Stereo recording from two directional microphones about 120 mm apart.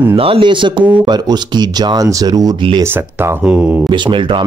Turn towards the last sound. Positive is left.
turn(degrees=-40)  # may be behind; listen again after turning